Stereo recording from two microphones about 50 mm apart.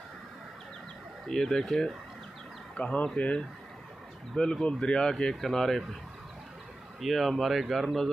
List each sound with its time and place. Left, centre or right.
1.2 s speech: centre
2.7 s speech: left
4.4 s speech: centre
5.3 s speech: centre
7.0 s speech: centre